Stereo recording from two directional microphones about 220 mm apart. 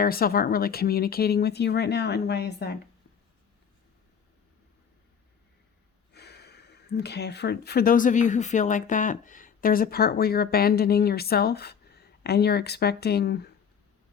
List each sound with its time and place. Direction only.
0.0 s speech: 40° left (ahead or behind)
6.1 s speech: 50° left (ahead or behind)